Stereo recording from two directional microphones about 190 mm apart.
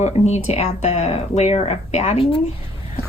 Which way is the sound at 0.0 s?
35° left (ahead or behind).